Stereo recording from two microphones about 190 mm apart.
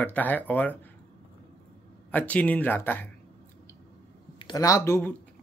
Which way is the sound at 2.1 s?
10° left (ahead or behind).